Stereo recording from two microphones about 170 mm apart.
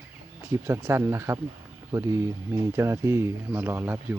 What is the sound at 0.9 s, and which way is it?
Speech, 15° right (ahead or behind).